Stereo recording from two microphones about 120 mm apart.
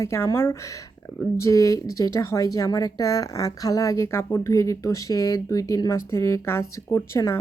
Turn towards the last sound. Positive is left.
turn(degrees=20)  # may be behind; listen again after turning